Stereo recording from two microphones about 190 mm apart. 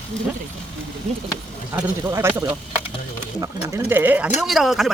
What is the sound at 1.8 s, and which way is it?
Speech, 10° right (ahead or behind).